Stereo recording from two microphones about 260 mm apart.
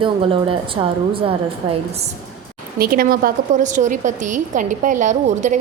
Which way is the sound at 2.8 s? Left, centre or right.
Right.